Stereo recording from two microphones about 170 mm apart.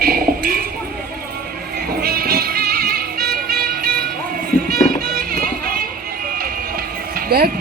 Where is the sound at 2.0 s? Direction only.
65° right (ahead or behind).